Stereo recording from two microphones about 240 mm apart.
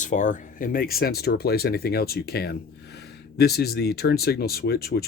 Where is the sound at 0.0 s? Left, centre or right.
Left.